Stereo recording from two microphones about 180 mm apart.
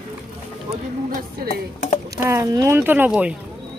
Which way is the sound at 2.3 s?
15° right (ahead or behind).